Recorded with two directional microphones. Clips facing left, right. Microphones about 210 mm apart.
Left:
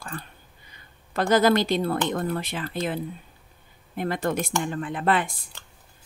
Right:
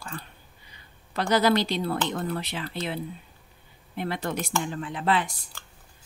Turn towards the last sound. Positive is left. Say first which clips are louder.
# left 2 dB
turn(degrees=50)  # may be behind; listen again after turning